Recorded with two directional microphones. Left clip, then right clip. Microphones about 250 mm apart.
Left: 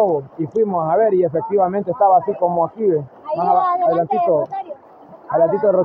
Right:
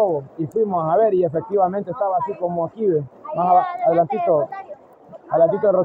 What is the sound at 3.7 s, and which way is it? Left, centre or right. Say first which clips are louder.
Speech: left 2 dB; left.